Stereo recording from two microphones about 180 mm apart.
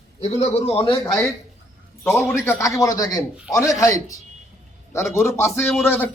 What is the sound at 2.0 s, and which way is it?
A man's voice, 10° left (ahead or behind).